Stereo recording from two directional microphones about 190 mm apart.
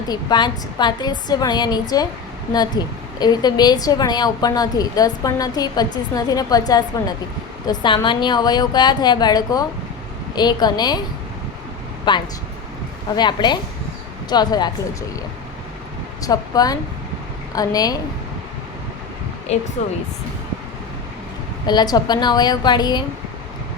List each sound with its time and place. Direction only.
0.1 s a woman's voice: 20° left (ahead or behind)
12.1 s a woman's voice: 25° left (ahead or behind)
16.2 s a woman's voice: 20° left (ahead or behind)
19.5 s speech: 35° left (ahead or behind)
21.7 s a woman's voice: 20° left (ahead or behind)